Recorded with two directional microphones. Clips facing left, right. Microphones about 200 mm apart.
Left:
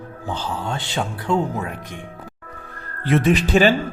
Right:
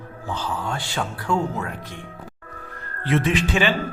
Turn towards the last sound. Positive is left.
turn(degrees=40)  # may be behind; listen again after turning